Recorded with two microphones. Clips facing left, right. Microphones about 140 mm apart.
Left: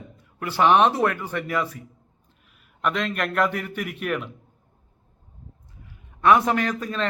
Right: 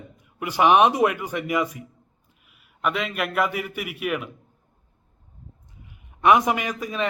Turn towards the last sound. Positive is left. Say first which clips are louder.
# left 1 dB
turn(degrees=-10)  # may be behind; listen again after turning